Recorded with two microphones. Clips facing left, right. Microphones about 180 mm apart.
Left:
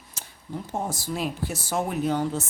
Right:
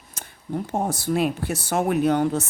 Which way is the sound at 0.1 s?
55° right (ahead or behind).